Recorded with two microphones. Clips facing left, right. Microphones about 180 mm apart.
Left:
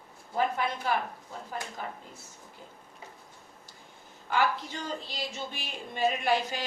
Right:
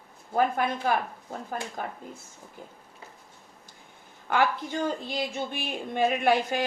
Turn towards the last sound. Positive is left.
turn(degrees=-55)  # may be behind; listen again after turning